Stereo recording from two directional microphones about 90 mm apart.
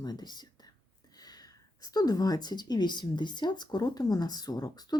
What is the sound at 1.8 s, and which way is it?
Speech, 45° left (ahead or behind).